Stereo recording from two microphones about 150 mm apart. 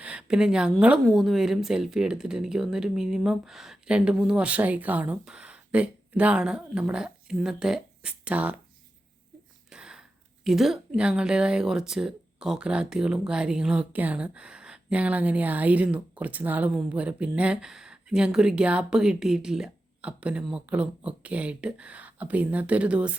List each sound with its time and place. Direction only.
0.0 s a sound: 10° right (ahead or behind)
0.8 s speech: 5° right (ahead or behind)
9.6 s a woman's voice: 5° right (ahead or behind)